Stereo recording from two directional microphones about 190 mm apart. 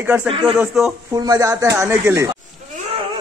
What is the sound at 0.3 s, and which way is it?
Speech, 25° right (ahead or behind).